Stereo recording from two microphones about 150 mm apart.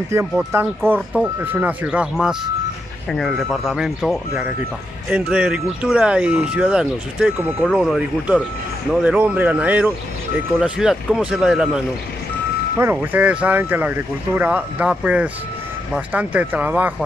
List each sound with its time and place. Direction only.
0.1 s speech: 20° right (ahead or behind); by 11.8 s 5° right (ahead or behind)
12.7 s speech: 15° right (ahead or behind)